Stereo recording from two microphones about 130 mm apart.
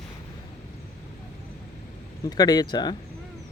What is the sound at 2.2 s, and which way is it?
Speech, 30° left (ahead or behind).